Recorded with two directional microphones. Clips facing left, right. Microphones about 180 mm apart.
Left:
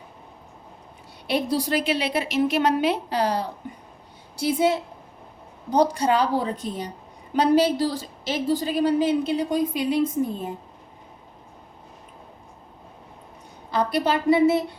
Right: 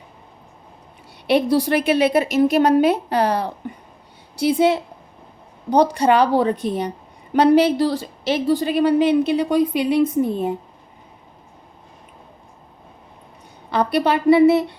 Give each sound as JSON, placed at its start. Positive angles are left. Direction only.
{"t": 1.3, "sound": "a woman's voice", "side_deg": -65}
{"t": 13.7, "sound": "a woman's voice", "side_deg": -65}